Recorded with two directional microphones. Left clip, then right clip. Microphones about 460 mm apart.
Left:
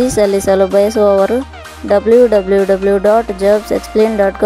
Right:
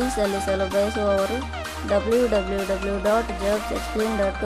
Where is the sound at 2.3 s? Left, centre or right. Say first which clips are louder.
Left 12 dB; centre.